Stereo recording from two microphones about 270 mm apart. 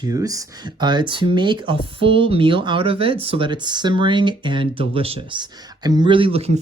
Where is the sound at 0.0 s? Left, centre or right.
Centre.